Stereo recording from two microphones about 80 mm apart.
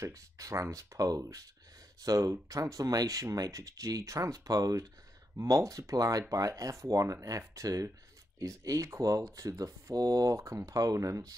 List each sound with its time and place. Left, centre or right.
0.0 s speech: right